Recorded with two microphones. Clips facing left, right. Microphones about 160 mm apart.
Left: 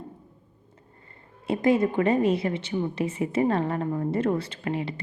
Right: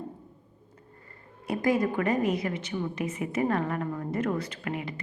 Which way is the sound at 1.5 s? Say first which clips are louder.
Left 4 dB; 25° left (ahead or behind).